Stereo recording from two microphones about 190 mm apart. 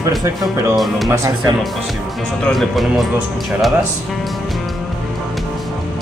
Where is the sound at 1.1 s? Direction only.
15° right (ahead or behind).